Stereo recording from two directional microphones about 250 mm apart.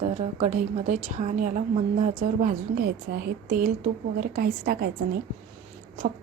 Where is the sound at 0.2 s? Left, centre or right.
Right.